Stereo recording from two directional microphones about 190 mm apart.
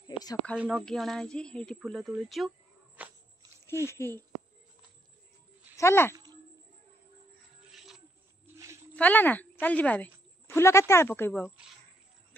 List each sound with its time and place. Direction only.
0.0 s a sound: 20° left (ahead or behind)
0.6 s speech: 5° right (ahead or behind)
3.8 s speech: 15° left (ahead or behind)
5.8 s speech: 15° left (ahead or behind)
7.7 s a sound: centre (ahead or behind)
8.9 s speech: 10° left (ahead or behind)